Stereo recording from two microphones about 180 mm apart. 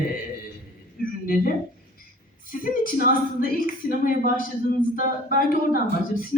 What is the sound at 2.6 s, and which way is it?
A woman's voice, 50° left (ahead or behind).